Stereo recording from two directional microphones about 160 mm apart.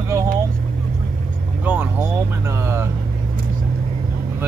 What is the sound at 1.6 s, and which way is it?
Vehicle, 10° right (ahead or behind).